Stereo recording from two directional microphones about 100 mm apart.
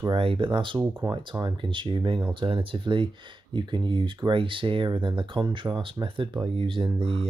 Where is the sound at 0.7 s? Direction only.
25° right (ahead or behind).